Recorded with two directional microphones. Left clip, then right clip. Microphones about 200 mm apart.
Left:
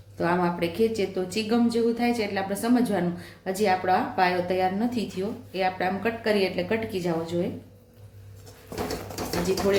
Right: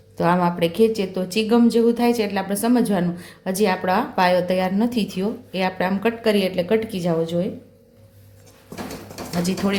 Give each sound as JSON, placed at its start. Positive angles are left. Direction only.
{"t": 0.2, "sound": "a woman's voice", "side_deg": -45}